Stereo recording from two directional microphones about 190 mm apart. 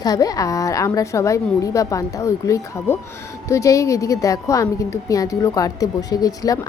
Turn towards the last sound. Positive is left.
turn(degrees=20)  # may be behind; listen again after turning